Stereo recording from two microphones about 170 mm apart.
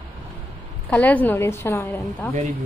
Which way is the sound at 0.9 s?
10° left (ahead or behind).